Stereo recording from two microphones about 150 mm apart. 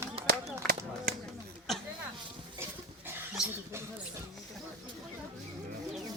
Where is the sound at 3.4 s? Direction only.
5° right (ahead or behind).